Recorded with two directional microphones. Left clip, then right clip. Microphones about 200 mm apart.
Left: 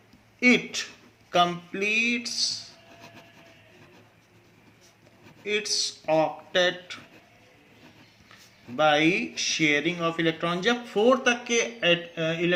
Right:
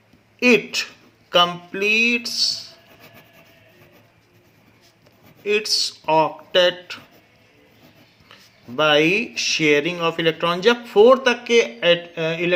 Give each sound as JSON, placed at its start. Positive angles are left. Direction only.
{"t": 0.3, "sound": "speech", "side_deg": -45}
{"t": 5.5, "sound": "speech", "side_deg": -50}
{"t": 8.3, "sound": "speech", "side_deg": -50}